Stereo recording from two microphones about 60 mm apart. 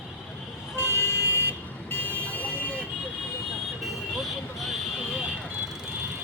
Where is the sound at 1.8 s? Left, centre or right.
Left.